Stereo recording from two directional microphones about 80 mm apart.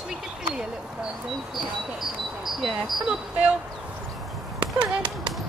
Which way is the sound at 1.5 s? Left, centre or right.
Centre.